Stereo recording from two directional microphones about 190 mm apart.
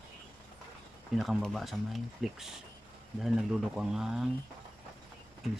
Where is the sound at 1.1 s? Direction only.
Centre (ahead or behind).